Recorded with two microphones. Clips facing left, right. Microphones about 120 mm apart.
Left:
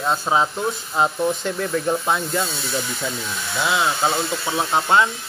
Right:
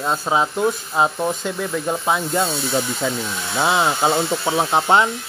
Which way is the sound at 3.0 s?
90° right.